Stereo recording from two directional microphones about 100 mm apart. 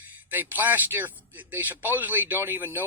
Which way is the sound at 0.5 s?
20° right (ahead or behind).